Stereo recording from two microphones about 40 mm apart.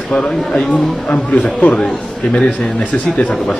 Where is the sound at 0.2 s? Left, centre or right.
Left.